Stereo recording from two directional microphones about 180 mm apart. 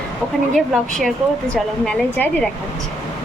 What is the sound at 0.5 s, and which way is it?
Speech, centre (ahead or behind).